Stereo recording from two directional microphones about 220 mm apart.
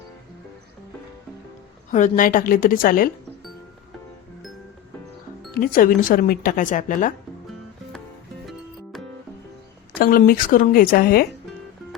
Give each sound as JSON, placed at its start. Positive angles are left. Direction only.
{"t": 1.9, "sound": "speech", "side_deg": 35}
{"t": 5.5, "sound": "speech", "side_deg": 40}
{"t": 9.9, "sound": "speech", "side_deg": 40}